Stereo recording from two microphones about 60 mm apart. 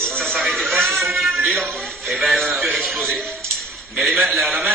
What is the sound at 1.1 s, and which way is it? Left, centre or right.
Music, centre.